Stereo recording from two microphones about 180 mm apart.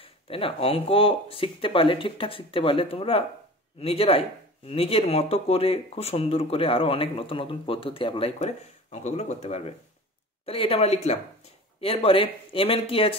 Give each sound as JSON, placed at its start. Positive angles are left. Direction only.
{"t": 0.0, "sound": "speech", "side_deg": 30}